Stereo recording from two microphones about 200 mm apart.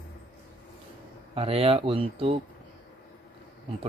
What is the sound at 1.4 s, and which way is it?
A man's voice, 30° right (ahead or behind).